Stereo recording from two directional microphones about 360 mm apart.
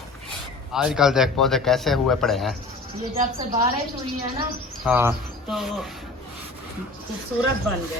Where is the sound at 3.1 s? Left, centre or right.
Centre.